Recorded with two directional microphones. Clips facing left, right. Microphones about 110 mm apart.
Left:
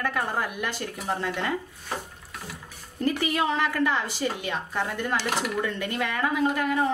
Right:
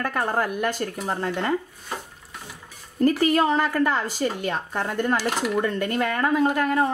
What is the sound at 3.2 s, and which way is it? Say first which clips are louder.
Speech: right 5 dB; 40° right (ahead or behind).